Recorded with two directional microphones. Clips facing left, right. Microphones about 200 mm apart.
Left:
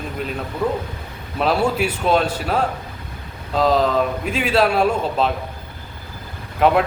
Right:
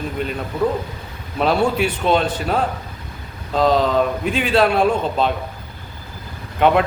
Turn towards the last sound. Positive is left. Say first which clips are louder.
# right 1 dB
turn(degrees=5)  # may be behind; listen again after turning